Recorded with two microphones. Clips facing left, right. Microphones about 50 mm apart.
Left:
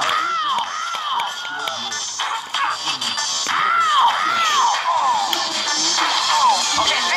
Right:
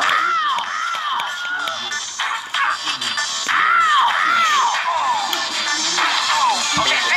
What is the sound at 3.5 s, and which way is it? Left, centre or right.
Music, right.